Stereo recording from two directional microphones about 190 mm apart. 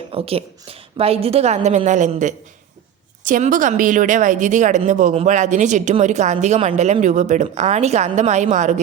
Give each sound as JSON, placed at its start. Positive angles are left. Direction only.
{"t": 0.1, "sound": "speech", "side_deg": -30}